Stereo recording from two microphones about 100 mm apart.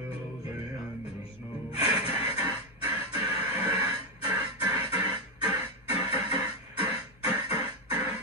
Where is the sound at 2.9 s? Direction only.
70° left (ahead or behind).